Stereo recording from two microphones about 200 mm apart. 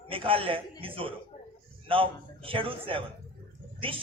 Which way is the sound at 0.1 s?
25° right (ahead or behind).